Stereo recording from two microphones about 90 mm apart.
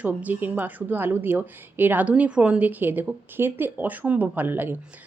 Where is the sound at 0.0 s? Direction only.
15° right (ahead or behind).